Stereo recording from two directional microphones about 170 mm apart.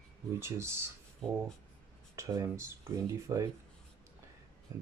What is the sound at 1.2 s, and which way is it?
Speech, 5° left (ahead or behind).